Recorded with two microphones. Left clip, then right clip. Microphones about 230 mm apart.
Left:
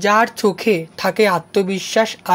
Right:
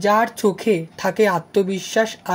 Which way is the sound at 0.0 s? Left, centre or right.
Left.